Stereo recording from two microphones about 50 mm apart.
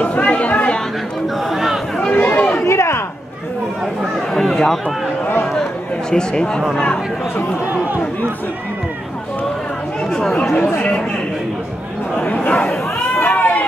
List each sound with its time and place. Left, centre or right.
0.0 s chatter: left
1.5 s chatter: centre
2.1 s chatter: left
2.6 s a sound: left
4.0 s speech: centre
12.2 s speech: left
13.1 s a sound: left